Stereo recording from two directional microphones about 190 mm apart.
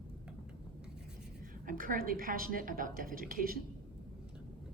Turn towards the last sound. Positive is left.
turn(degrees=-50)  # may be behind; listen again after turning